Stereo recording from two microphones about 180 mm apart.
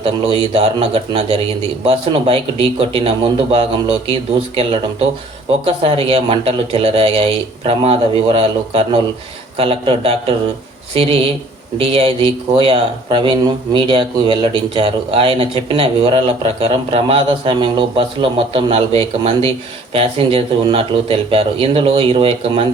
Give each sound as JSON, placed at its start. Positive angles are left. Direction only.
{"t": 0.0, "sound": "speech", "side_deg": -30}